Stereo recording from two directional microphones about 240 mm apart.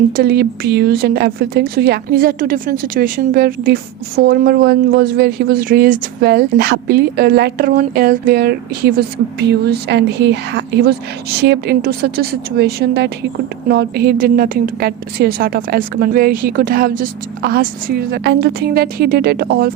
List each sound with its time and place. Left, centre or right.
0.2 s speech: right